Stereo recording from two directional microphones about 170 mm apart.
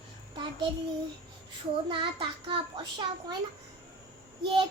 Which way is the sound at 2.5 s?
30° right (ahead or behind).